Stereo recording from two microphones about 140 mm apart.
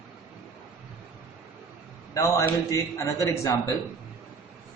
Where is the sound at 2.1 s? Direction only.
25° left (ahead or behind).